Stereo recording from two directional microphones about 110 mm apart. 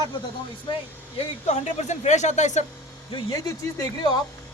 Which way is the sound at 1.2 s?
80° left.